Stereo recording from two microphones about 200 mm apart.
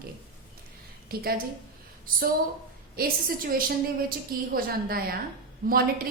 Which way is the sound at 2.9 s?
45° right (ahead or behind).